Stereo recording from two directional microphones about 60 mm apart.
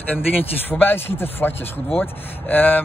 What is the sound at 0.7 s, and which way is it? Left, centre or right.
Speech, left.